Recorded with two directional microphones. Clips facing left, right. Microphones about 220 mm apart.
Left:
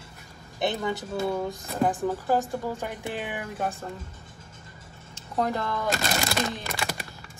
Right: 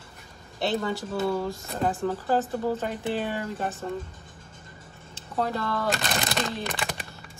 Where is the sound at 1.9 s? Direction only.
15° left (ahead or behind).